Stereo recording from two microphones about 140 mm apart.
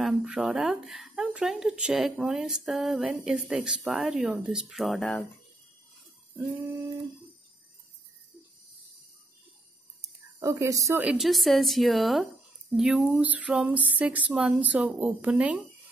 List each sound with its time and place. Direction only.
0.0 s speech: 10° right (ahead or behind)
4.9 s speech: 10° left (ahead or behind)
10.0 s a sound: 20° right (ahead or behind)
11.0 s speech: 5° right (ahead or behind)